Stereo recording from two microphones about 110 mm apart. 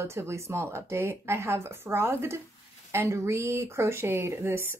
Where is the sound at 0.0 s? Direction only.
25° right (ahead or behind).